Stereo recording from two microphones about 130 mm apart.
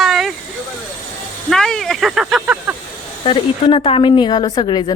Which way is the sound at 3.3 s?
45° left (ahead or behind).